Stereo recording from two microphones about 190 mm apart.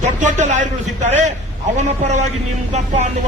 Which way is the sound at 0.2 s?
40° right (ahead or behind).